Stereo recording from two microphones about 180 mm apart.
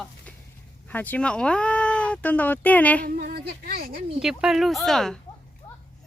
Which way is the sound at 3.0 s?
55° right (ahead or behind).